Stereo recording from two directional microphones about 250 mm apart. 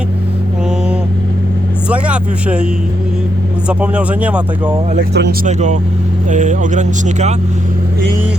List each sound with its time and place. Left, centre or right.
1.9 s speech: centre
3.7 s speech: centre
4.9 s speech: right
5.5 s speech: right